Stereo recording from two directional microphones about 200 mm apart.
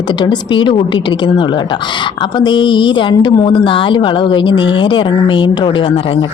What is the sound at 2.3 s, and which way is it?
Speech, 25° left (ahead or behind).